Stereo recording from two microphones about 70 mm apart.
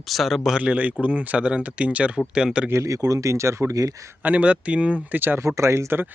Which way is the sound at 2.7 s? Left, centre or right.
Right.